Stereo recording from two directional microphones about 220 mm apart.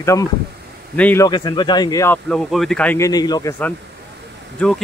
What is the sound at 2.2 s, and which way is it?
Speech, centre (ahead or behind).